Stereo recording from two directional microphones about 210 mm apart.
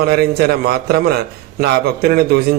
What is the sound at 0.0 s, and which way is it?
A man's voice, 50° right (ahead or behind).